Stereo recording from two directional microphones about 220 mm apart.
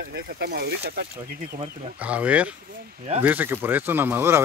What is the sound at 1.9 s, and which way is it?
Speech, 5° right (ahead or behind).